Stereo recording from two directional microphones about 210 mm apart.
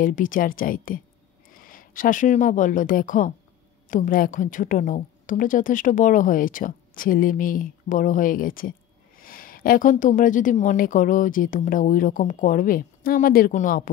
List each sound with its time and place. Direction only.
0.0 s a woman's voice: 40° left (ahead or behind)